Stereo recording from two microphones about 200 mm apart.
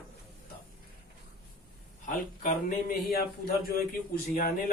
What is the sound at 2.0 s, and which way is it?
Speech, 45° left (ahead or behind).